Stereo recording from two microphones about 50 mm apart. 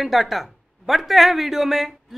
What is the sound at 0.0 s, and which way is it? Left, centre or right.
Speech, centre.